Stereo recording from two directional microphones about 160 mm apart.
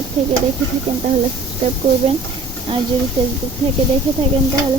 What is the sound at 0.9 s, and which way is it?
Speech, 45° right (ahead or behind).